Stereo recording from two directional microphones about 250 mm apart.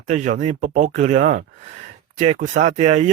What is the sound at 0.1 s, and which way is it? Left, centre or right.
Speech, right.